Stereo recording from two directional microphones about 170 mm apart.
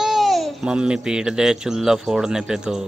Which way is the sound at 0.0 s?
Centre (ahead or behind).